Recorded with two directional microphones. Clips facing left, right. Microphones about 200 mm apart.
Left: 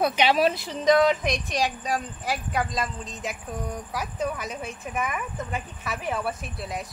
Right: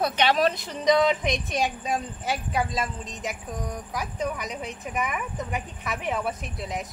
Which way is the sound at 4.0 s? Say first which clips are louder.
Even; 15° right (ahead or behind).